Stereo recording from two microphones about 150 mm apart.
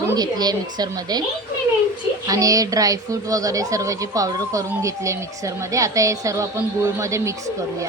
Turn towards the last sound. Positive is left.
turn(degrees=-20)  # may be behind; listen again after turning